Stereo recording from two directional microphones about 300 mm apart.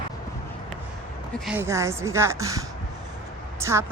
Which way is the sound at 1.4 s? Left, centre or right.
Centre.